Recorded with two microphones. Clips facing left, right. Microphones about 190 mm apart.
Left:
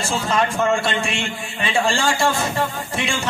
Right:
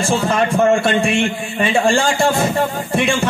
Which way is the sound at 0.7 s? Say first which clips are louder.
Right 7 dB; 55° right (ahead or behind).